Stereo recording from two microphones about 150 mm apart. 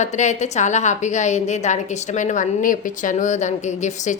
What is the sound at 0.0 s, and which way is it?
Speech, 50° left (ahead or behind).